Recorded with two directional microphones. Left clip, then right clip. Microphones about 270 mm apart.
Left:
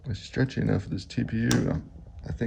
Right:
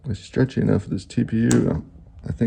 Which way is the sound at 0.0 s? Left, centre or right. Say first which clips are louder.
Right 7 dB; centre.